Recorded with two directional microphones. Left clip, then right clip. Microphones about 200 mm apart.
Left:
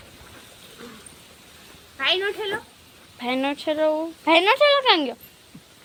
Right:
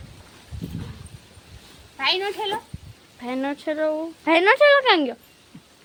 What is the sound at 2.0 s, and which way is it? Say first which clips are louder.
Speech: even; 45° right (ahead or behind).